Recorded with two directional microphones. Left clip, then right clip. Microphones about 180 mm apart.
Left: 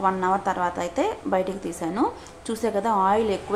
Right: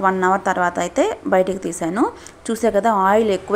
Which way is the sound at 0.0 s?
30° right (ahead or behind).